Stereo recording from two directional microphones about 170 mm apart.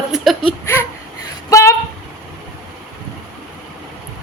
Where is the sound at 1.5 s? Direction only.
20° left (ahead or behind).